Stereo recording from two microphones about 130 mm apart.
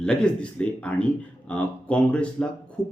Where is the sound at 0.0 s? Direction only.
5° left (ahead or behind).